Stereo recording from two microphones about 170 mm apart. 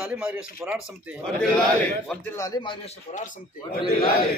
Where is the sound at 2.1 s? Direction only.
15° left (ahead or behind); by 3.4 s 45° left (ahead or behind).